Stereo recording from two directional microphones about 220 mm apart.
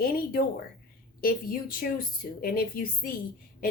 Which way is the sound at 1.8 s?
40° left (ahead or behind).